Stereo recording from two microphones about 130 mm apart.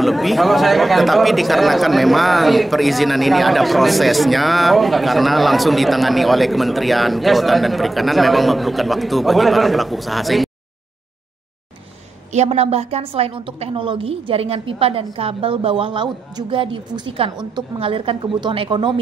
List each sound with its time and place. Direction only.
0.0 s speech: centre (ahead or behind)
12.3 s a woman's voice: 55° right (ahead or behind); by 18.9 s 40° right (ahead or behind)